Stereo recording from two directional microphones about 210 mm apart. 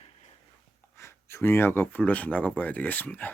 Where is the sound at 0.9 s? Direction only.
10° left (ahead or behind).